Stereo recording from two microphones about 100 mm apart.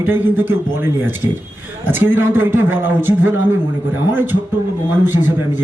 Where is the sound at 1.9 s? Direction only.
20° right (ahead or behind).